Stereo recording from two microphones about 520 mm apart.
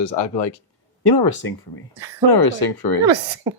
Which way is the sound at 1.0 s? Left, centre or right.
Left.